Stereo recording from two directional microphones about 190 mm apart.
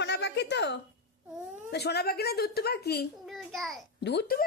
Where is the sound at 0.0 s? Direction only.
65° left (ahead or behind).